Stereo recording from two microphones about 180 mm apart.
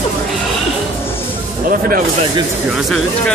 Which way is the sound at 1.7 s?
50° right (ahead or behind).